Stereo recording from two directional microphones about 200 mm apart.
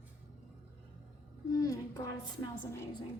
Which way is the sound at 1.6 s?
15° left (ahead or behind).